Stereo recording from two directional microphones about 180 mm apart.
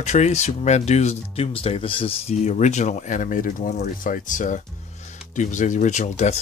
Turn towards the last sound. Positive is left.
turn(degrees=40)  # may be behind; listen again after turning